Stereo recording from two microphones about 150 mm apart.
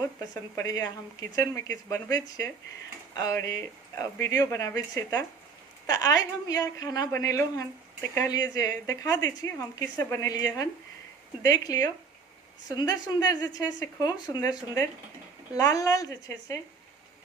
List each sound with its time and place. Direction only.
0.5 s a woman's voice: 25° left (ahead or behind)